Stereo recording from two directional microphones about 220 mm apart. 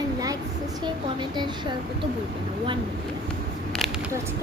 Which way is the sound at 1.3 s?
20° right (ahead or behind).